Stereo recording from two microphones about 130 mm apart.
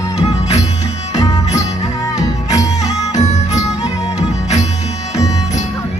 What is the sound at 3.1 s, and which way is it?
Music, 60° left (ahead or behind).